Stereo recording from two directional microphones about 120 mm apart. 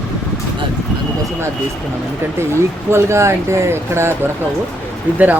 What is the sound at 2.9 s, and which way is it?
Speech, 25° right (ahead or behind).